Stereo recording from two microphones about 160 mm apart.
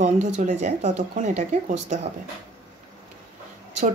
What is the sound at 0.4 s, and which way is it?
Speech, 50° right (ahead or behind).